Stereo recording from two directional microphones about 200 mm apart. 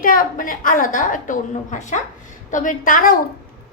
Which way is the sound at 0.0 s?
45° left (ahead or behind).